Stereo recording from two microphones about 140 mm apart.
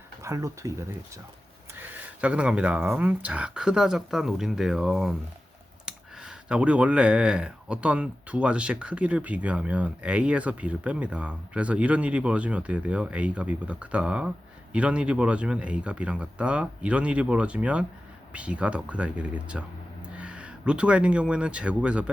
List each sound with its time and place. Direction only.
0.2 s speech: 20° right (ahead or behind)